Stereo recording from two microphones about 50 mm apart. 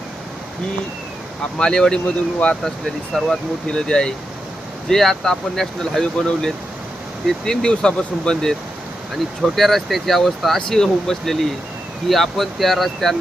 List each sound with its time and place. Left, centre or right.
1.5 s speech: centre
9.6 s speech: centre